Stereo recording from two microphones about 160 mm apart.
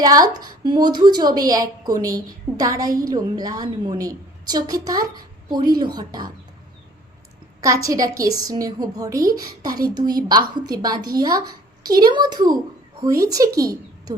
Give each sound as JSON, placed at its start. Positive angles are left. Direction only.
{"t": 0.0, "sound": "a woman's voice", "side_deg": -25}
{"t": 7.6, "sound": "a woman's voice", "side_deg": -20}